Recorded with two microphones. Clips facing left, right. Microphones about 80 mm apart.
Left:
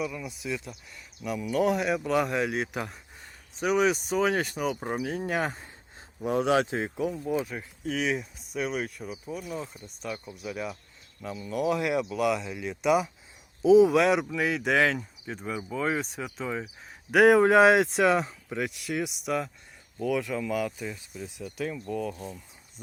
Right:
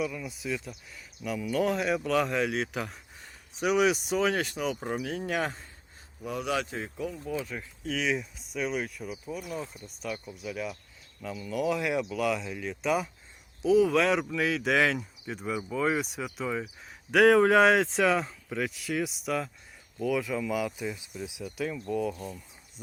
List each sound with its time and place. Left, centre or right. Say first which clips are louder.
0.0 s speech: even; centre
6.2 s speech: left 7 dB; left
6.7 s speech: left 6 dB; left
7.0 s speech: left 4 dB; left
7.4 s speech: left 2 dB; centre
11.7 s speech: left 3 dB; centre
13.7 s speech: left 5 dB; centre
14.0 s speech: left 2 dB; centre
22.1 s speech: even; centre